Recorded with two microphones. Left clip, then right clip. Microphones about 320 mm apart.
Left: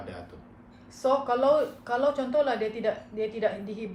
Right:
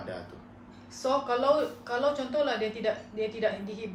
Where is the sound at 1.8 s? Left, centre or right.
Centre.